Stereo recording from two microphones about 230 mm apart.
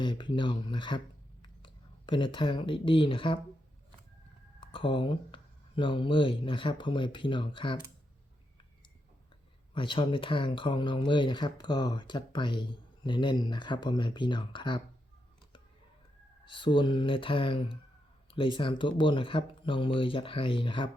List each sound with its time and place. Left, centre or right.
0.0 s speech: left
4.6 s speech: left
9.7 s speech: left
16.5 s speech: left